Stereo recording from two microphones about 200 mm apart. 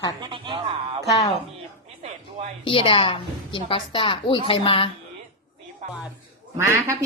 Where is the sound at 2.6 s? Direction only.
25° left (ahead or behind).